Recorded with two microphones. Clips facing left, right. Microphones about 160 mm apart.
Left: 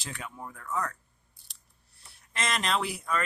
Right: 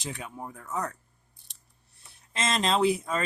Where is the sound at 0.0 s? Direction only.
20° right (ahead or behind).